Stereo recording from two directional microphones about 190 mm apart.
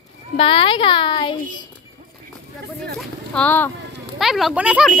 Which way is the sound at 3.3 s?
10° left (ahead or behind).